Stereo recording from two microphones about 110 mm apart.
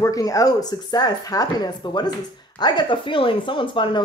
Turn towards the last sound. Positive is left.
turn(degrees=50)  # may be behind; listen again after turning